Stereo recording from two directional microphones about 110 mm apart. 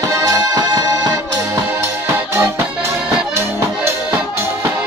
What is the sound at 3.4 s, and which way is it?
Accordion, 20° right (ahead or behind).